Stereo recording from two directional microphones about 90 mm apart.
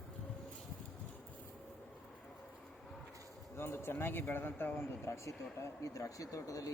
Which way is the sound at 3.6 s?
25° left (ahead or behind).